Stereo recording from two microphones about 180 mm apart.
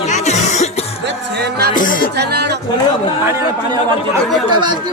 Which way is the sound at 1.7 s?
50° left (ahead or behind).